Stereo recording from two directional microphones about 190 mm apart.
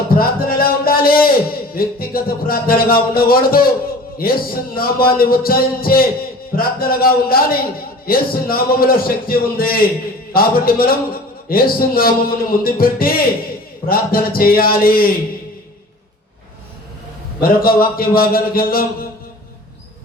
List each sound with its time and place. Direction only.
0.1 s music: 50° left (ahead or behind)
17.4 s music: 50° left (ahead or behind)